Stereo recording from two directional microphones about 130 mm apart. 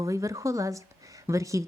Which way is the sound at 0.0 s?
25° right (ahead or behind).